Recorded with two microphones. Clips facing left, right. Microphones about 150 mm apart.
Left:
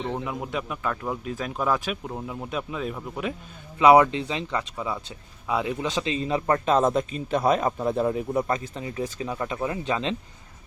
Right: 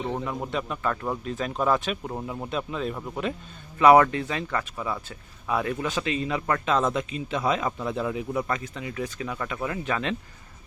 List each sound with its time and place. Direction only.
0.3 s speech: 5° left (ahead or behind); by 10.2 s 25° left (ahead or behind)